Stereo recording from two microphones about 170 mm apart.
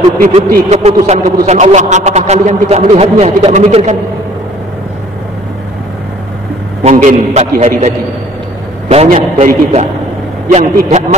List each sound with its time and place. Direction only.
0.2 s speech: 55° right (ahead or behind)
0.7 s a man's voice: 40° right (ahead or behind)
6.8 s a man's voice: 45° right (ahead or behind)
8.9 s a man's voice: 45° right (ahead or behind)